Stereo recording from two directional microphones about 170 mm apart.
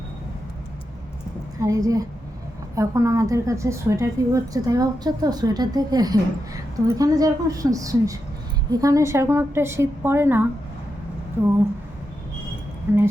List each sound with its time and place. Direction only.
1.6 s a woman's voice: 20° right (ahead or behind)
12.9 s a woman's voice: 10° right (ahead or behind)